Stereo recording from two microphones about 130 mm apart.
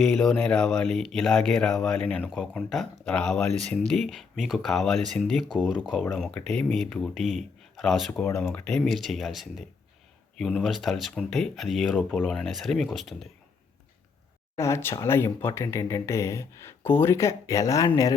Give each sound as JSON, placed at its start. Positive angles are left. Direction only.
{"t": 0.0, "sound": "speech", "side_deg": 5}
{"t": 2.2, "sound": "speech", "side_deg": 0}
{"t": 8.1, "sound": "speech", "side_deg": 10}
{"t": 14.5, "sound": "speech", "side_deg": 20}